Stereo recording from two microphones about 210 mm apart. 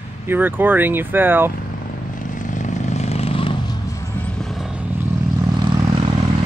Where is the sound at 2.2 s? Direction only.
40° left (ahead or behind).